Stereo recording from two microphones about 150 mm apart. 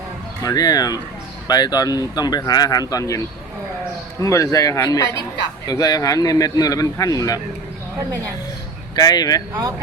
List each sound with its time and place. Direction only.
0.4 s speech: 25° left (ahead or behind)
4.2 s speech: 20° left (ahead or behind)
9.0 s speech: 25° left (ahead or behind)